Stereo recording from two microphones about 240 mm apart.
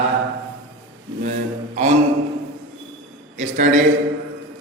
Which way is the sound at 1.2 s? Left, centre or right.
Right.